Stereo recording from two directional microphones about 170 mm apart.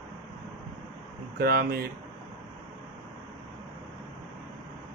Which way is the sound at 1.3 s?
65° right (ahead or behind).